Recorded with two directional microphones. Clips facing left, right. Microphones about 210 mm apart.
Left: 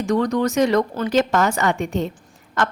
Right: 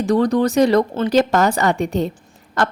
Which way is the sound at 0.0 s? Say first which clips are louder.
Right 3 dB; 35° right (ahead or behind).